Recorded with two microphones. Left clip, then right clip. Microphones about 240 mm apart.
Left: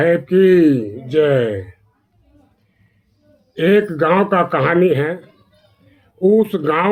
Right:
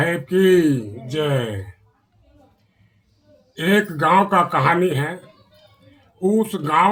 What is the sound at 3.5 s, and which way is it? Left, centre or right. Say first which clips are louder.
Speech: left 5 dB; right.